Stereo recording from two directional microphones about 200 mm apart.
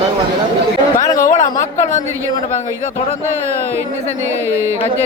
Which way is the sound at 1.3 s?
35° left (ahead or behind).